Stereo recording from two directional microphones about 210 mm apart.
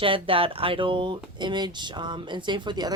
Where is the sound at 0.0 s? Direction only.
25° right (ahead or behind).